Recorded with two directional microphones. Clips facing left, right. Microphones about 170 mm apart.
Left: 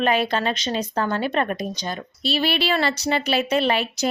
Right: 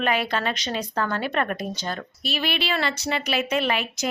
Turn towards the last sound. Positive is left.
turn(degrees=30)  # may be behind; listen again after turning